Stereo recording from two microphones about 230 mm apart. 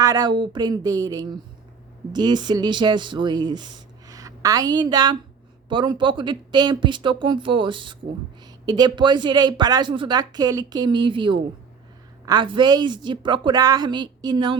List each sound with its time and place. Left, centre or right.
0.0 s speech: centre